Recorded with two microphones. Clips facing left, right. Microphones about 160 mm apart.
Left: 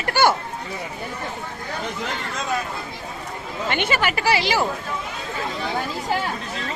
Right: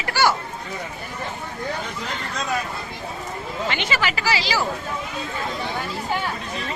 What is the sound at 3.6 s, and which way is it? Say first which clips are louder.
Speech: left 3 dB; 55° left (ahead or behind).